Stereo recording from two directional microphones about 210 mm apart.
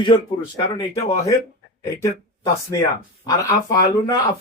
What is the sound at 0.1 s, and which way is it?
Speech, 25° left (ahead or behind).